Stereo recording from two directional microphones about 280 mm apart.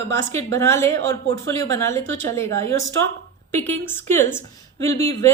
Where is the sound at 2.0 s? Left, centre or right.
Right.